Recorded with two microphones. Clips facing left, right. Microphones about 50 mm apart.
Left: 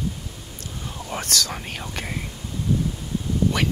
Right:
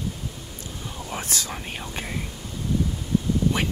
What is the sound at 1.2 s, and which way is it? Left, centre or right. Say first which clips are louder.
Speech: left 5 dB; left.